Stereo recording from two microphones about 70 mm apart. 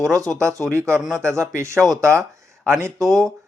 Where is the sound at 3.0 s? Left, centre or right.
Centre.